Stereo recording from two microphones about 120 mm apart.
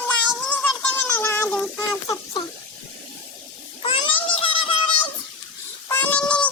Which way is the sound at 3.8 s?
45° left (ahead or behind).